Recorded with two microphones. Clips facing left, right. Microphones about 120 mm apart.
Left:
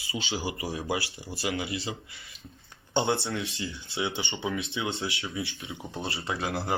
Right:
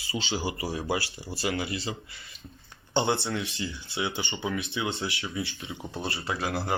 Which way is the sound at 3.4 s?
25° left (ahead or behind).